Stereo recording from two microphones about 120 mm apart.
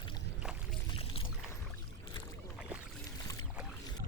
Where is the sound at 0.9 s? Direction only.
50° left (ahead or behind).